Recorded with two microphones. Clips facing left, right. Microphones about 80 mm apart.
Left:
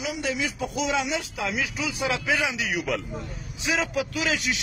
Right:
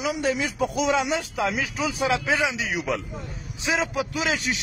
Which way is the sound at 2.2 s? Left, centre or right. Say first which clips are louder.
Right 2 dB; right.